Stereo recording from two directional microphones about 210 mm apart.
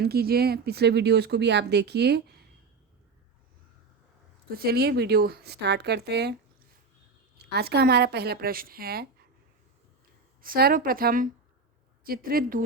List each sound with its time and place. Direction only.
0.0 s speech: 50° right (ahead or behind)
4.4 s speech: 45° right (ahead or behind)
7.3 s speech: 50° right (ahead or behind)
10.4 s speech: 45° right (ahead or behind)